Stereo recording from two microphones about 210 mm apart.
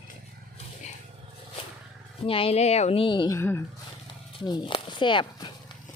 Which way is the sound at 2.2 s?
25° left (ahead or behind).